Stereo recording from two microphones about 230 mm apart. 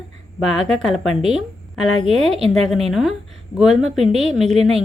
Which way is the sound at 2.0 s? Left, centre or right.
Right.